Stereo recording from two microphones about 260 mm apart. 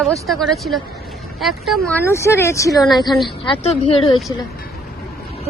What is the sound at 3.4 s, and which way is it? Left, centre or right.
Speech, left.